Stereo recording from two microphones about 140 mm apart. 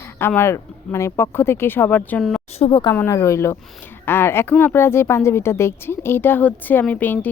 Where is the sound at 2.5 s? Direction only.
40° left (ahead or behind).